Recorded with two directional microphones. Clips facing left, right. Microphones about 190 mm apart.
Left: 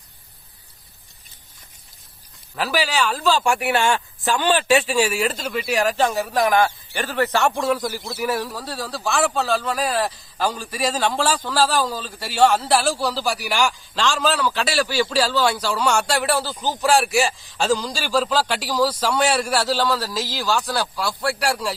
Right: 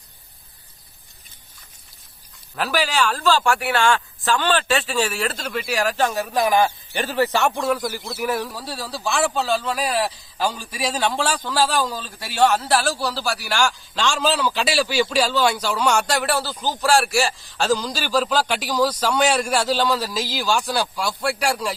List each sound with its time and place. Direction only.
2.6 s a man's voice: 5° left (ahead or behind)
3.5 s a man's voice: 20° left (ahead or behind); by 7.3 s 15° right (ahead or behind)
7.3 s a man's voice: centre (ahead or behind); by 13.6 s 15° left (ahead or behind)
13.6 s speech: centre (ahead or behind)
18.3 s a man's voice: 5° left (ahead or behind)